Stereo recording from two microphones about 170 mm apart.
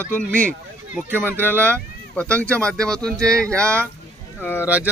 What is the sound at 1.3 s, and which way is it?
Speech, 15° right (ahead or behind).